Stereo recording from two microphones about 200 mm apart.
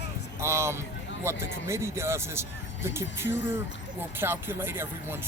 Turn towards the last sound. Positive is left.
turn(degrees=-10)  # may be behind; listen again after turning